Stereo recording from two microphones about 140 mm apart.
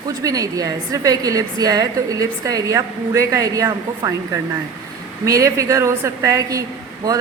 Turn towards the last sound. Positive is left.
turn(degrees=-25)  # may be behind; listen again after turning